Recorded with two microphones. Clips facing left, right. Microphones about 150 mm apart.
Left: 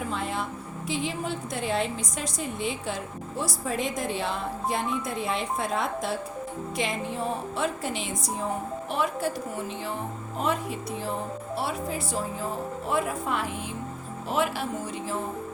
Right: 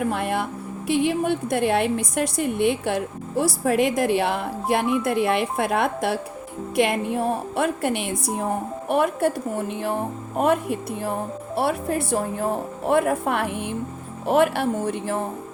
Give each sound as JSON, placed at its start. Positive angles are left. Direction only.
{"t": 0.0, "sound": "music", "side_deg": -65}
{"t": 0.9, "sound": "a woman's voice", "side_deg": -65}